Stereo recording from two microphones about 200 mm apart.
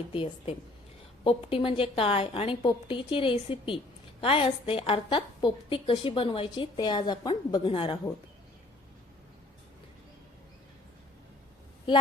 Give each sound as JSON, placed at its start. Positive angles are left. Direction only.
{"t": 0.1, "sound": "a woman's voice", "side_deg": 30}